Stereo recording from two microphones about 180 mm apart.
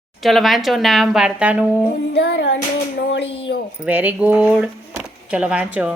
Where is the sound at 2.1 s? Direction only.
70° left (ahead or behind).